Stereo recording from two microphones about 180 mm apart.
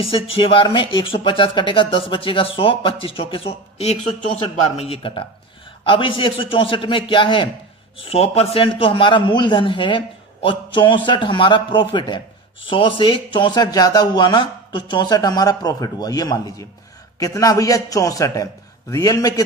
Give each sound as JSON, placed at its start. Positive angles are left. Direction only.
{"t": 0.0, "sound": "a man's voice", "side_deg": 30}